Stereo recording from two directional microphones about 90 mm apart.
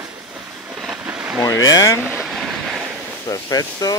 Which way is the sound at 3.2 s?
40° left (ahead or behind).